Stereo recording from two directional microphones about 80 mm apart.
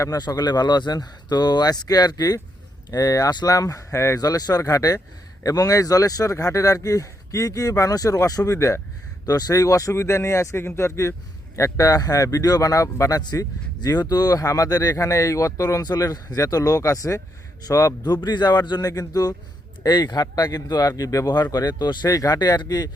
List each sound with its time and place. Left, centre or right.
0.3 s speech: left
4.2 s speech: left
9.2 s speech: left
15.8 s speech: left
19.8 s speech: left
20.2 s speech: left